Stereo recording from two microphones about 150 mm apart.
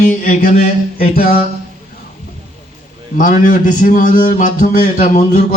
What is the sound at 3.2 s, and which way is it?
A man's voice, 65° left (ahead or behind).